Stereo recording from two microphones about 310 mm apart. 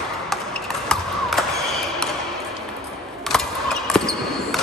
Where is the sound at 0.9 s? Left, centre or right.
Centre.